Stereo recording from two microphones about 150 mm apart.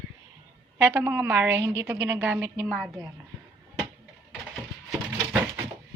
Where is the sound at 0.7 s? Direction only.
15° right (ahead or behind).